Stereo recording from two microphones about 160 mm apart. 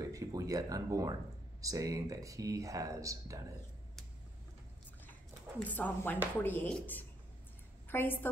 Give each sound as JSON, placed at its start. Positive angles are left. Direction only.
{"t": 0.1, "sound": "speech", "side_deg": -20}
{"t": 5.6, "sound": "speech", "side_deg": 10}